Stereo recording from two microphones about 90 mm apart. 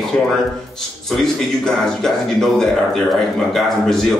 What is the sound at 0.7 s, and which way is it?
A man's voice, 5° left (ahead or behind).